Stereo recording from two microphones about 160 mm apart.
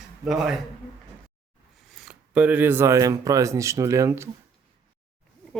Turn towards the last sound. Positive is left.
turn(degrees=-15)  # may be behind; listen again after turning